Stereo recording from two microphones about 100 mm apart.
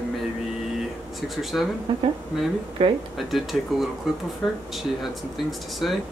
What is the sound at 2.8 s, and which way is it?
Speech, 65° right (ahead or behind).